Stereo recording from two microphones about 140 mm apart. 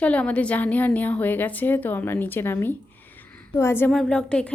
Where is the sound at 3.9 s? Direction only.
5° left (ahead or behind).